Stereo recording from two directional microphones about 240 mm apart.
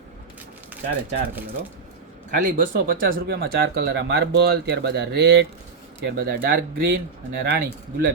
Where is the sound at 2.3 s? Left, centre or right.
Right.